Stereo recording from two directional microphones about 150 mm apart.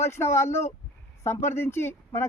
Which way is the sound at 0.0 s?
15° left (ahead or behind).